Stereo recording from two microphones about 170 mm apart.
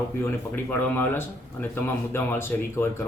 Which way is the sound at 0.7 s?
10° left (ahead or behind).